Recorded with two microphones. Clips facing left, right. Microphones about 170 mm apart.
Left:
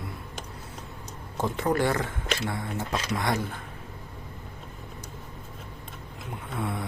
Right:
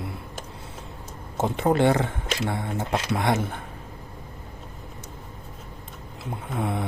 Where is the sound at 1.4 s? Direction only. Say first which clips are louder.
Right 4 dB; 25° right (ahead or behind).